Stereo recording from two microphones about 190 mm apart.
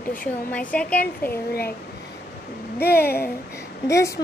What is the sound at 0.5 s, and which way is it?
Speech, 5° left (ahead or behind).